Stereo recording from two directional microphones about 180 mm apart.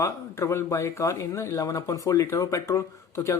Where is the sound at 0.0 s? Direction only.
15° left (ahead or behind).